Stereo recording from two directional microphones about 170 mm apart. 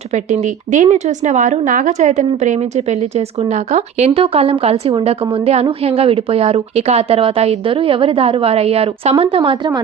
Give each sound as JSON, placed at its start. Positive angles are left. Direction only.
{"t": 0.1, "sound": "speech", "side_deg": -40}